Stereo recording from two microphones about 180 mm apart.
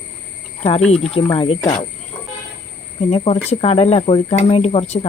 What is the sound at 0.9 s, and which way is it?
Speech, 35° left (ahead or behind).